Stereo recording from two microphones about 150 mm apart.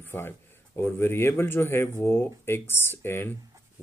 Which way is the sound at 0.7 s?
15° left (ahead or behind).